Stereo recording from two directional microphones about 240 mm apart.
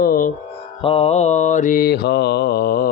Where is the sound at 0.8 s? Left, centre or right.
Left.